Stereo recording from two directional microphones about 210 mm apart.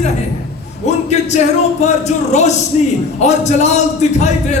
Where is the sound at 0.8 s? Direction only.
30° left (ahead or behind).